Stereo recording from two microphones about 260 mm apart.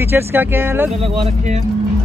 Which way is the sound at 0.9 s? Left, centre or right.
Right.